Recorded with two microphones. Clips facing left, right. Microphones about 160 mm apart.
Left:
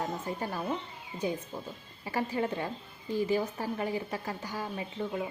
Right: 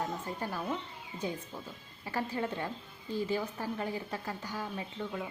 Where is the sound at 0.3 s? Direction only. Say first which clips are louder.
Left 2 dB; 10° left (ahead or behind).